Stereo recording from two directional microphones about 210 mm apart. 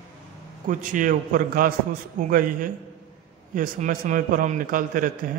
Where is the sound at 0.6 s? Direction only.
40° right (ahead or behind).